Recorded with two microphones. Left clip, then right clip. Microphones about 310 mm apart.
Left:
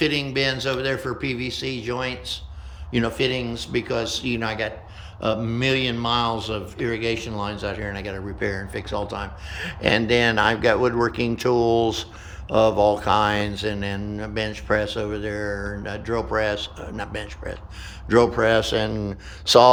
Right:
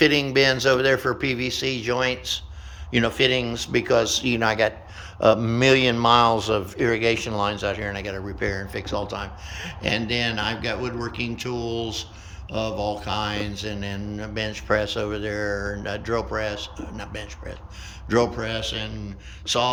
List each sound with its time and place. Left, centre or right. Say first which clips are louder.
0.0 s a man's voice: right 4 dB; centre